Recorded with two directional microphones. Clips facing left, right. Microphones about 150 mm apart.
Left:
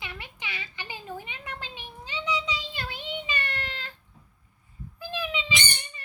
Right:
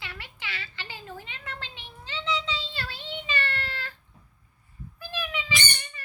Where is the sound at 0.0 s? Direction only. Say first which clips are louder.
Left 1 dB; 20° left (ahead or behind).